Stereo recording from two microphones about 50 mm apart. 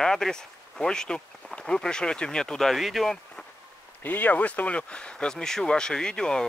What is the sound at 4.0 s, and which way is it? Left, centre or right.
Speech, left.